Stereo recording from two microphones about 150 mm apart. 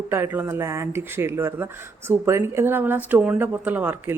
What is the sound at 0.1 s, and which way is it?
Speech, 15° right (ahead or behind).